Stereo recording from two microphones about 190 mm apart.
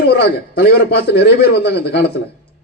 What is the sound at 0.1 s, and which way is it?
A man's voice, 55° left (ahead or behind).